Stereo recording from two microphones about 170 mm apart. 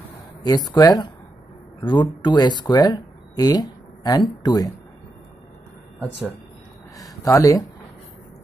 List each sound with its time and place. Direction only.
0.4 s speech: 25° left (ahead or behind)
7.0 s speech: 20° left (ahead or behind)